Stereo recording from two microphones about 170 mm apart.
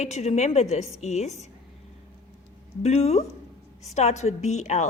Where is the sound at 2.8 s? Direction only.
40° left (ahead or behind).